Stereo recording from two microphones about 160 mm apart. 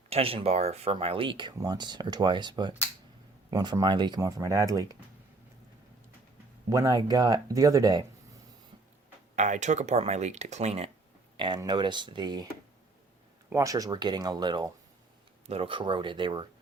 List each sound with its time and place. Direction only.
0.1 s speech: 35° right (ahead or behind); by 4.9 s 20° right (ahead or behind)
6.7 s speech: 20° right (ahead or behind)
9.3 s speech: 50° right (ahead or behind)
11.3 s speech: 30° right (ahead or behind)
13.5 s speech: 20° right (ahead or behind)